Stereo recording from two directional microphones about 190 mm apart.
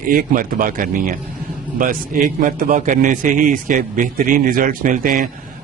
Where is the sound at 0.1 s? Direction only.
45° right (ahead or behind).